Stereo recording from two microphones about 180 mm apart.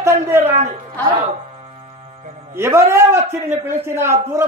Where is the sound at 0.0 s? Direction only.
15° right (ahead or behind).